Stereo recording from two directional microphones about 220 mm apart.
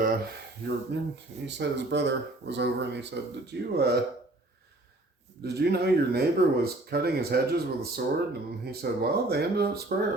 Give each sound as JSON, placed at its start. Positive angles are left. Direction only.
{"t": 0.0, "sound": "speech", "side_deg": -45}
{"t": 5.4, "sound": "speech", "side_deg": -45}